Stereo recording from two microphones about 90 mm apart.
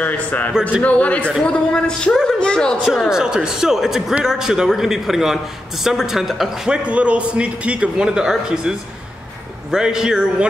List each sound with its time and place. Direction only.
0.0 s a man's voice: 20° left (ahead or behind)
2.8 s a man's voice: 5° right (ahead or behind)